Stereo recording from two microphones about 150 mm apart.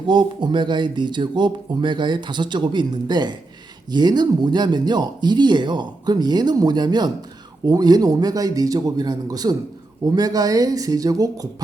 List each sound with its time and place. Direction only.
0.1 s speech: 30° right (ahead or behind)